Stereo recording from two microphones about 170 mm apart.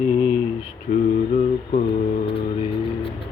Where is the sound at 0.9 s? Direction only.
60° left (ahead or behind).